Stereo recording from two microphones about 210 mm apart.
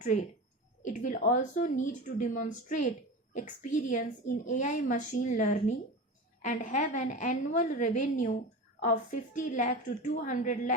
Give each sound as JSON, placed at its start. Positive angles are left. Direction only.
{"t": 0.9, "sound": "a woman's voice", "side_deg": 35}